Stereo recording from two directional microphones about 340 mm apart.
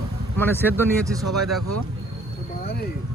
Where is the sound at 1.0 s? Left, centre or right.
Centre.